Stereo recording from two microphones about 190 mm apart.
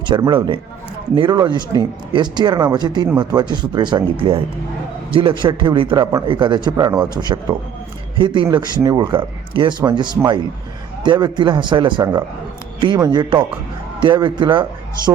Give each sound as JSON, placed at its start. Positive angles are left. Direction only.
{"t": 0.1, "sound": "speech", "side_deg": -25}